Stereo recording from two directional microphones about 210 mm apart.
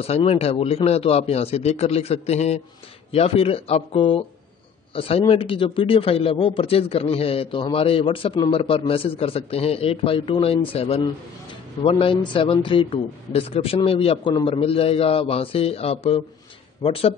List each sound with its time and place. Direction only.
0.0 s a man's voice: 30° left (ahead or behind)